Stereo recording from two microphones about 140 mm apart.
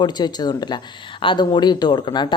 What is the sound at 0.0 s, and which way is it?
Speech, 30° left (ahead or behind).